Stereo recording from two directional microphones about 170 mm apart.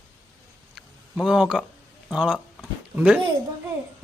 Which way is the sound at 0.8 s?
5° right (ahead or behind).